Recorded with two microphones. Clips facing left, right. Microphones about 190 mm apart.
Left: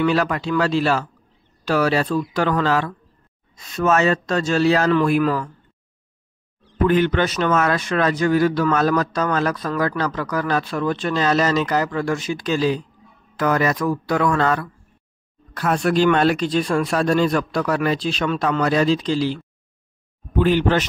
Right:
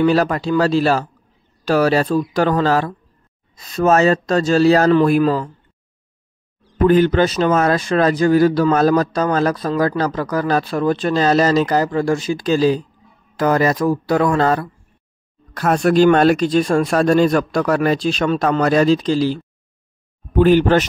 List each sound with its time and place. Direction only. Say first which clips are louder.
0.0 s speech: right 4 dB; 40° right (ahead or behind)
6.9 s a man's voice: right 5 dB; 35° right (ahead or behind)